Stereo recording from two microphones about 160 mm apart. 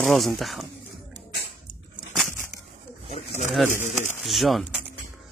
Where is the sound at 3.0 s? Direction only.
40° left (ahead or behind).